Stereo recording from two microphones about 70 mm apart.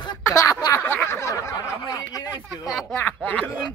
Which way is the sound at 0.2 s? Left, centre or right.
Left.